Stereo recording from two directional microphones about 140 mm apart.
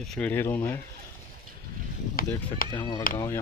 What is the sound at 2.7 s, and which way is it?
Speech, 30° left (ahead or behind).